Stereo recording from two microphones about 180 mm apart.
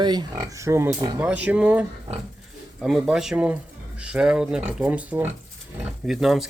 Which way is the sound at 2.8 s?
Centre (ahead or behind).